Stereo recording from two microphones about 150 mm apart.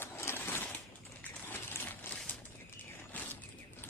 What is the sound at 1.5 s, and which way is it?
Crumpling, 15° left (ahead or behind).